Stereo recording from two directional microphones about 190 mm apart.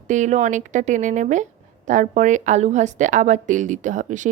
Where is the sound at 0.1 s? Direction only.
40° right (ahead or behind).